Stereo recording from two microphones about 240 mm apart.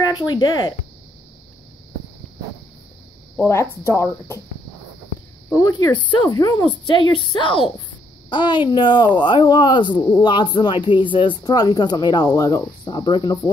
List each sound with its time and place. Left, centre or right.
0.3 s speech: left
3.3 s speech: centre
5.6 s speech: centre